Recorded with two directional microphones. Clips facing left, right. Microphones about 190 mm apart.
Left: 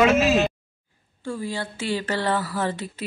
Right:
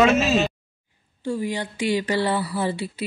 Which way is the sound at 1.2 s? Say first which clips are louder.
Right 3 dB; 15° right (ahead or behind).